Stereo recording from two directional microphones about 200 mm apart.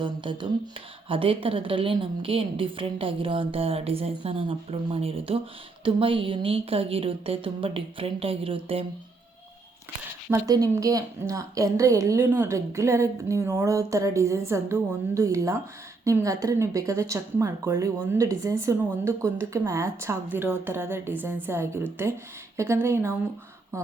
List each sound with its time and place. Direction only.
0.0 s a woman's voice: 25° right (ahead or behind)
10.2 s a woman's voice: 15° right (ahead or behind)